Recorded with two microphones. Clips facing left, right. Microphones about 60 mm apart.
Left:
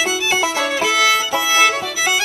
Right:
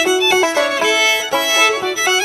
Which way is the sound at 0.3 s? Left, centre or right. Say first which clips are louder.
Right 4 dB; right.